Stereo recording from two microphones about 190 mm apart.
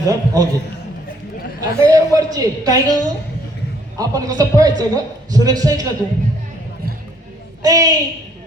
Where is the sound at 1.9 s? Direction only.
20° right (ahead or behind).